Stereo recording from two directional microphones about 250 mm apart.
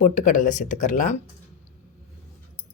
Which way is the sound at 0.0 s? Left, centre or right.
Left.